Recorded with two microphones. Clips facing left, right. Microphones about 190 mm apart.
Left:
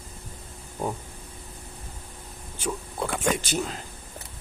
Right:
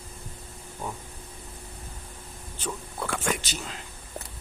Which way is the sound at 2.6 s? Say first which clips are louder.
Left 4 dB; 15° left (ahead or behind).